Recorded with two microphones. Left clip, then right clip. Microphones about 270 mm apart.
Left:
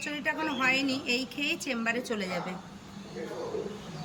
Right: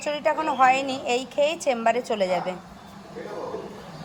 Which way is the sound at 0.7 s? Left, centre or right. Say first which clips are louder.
Right 6 dB; centre.